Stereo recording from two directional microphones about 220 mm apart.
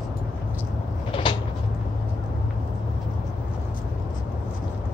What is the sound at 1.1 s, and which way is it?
Cupboard open or close, 25° left (ahead or behind).